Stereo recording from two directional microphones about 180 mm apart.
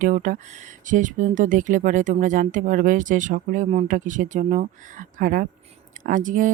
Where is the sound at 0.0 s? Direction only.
45° right (ahead or behind).